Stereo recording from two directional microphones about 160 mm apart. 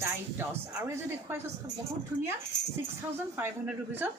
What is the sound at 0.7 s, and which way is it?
Speech, 20° right (ahead or behind).